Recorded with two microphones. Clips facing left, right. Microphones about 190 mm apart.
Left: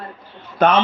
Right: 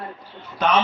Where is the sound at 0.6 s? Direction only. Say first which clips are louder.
Left 6 dB; 55° left (ahead or behind).